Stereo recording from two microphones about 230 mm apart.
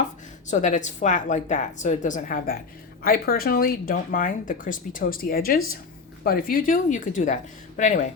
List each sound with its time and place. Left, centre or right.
0.5 s speech: left